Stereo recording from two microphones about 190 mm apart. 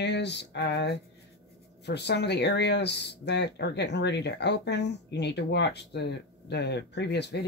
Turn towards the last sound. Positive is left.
turn(degrees=65)  # may be behind; listen again after turning